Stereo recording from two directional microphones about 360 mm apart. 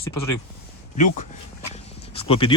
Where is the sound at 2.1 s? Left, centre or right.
Centre.